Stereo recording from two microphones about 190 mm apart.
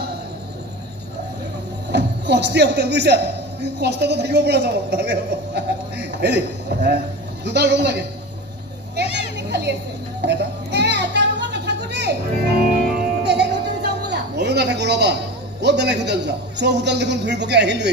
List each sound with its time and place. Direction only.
1.9 s a man's voice: 65° right (ahead or behind)
9.1 s a sound: 60° right (ahead or behind)
10.2 s music: 65° right (ahead or behind)
15.6 s a man's voice: 65° right (ahead or behind)